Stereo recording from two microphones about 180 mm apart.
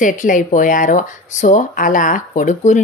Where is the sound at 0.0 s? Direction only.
45° left (ahead or behind).